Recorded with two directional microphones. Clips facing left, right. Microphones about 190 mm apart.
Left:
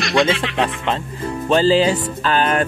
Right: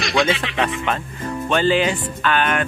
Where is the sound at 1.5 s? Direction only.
30° left (ahead or behind).